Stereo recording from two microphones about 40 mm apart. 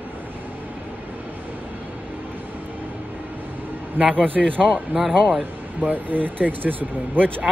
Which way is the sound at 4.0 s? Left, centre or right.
Right.